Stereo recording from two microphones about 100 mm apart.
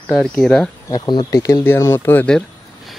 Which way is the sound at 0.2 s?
5° left (ahead or behind).